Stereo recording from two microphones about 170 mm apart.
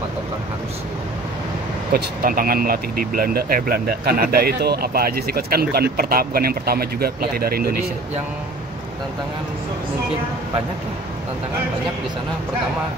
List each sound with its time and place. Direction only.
1.9 s speech: 60° right (ahead or behind)